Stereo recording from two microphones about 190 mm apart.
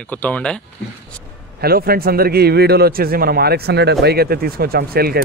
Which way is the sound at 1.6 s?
55° right (ahead or behind).